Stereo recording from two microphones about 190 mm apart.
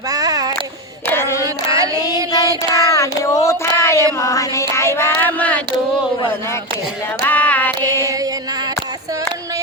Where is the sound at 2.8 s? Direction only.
15° left (ahead or behind).